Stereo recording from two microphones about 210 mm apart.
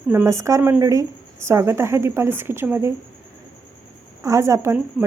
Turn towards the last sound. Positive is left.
turn(degrees=-10)  # may be behind; listen again after turning